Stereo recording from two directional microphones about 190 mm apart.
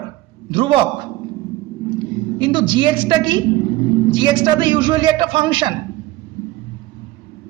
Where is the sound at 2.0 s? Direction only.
25° right (ahead or behind).